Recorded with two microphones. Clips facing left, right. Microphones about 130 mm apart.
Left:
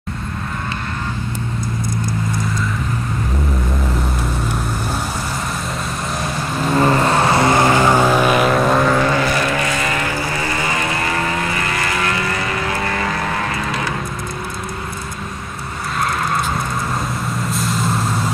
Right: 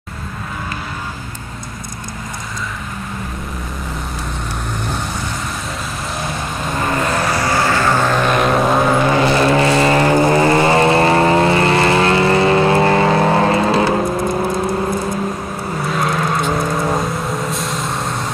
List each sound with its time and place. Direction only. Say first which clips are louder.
7.1 s vehicle: left 3 dB; 25° left (ahead or behind); by 8.8 s centre (ahead or behind)
8.9 s vehicle: right 3 dB; 20° right (ahead or behind)
14.0 s vehicle: right 9 dB; 50° right (ahead or behind)
15.9 s vehicle: right 1 dB; centre (ahead or behind)